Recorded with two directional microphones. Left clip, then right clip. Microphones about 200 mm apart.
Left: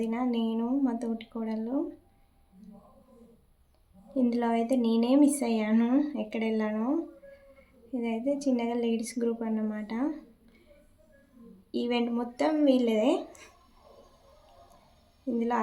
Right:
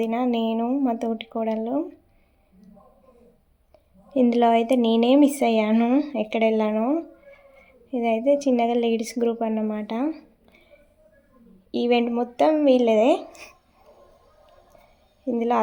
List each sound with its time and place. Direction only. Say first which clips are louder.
0.0 s speech: right 7 dB; 35° right (ahead or behind)
4.1 s speech: right 10 dB; 35° right (ahead or behind)
11.7 s speech: right 8 dB; 30° right (ahead or behind)
15.4 s speech: right 7 dB; 30° right (ahead or behind)